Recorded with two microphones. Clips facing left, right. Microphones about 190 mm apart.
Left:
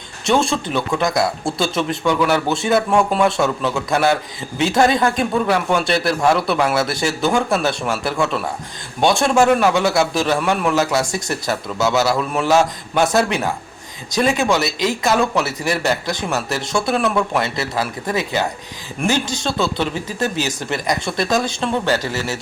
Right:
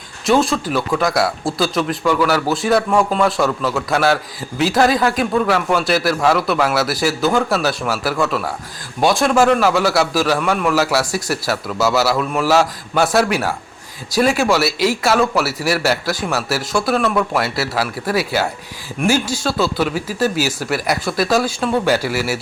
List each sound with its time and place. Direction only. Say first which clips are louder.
0.3 s a man's voice: right 2 dB; 5° right (ahead or behind)
3.9 s a man's voice: even; 20° left (ahead or behind)
4.5 s a man's voice: right 1 dB; centre (ahead or behind)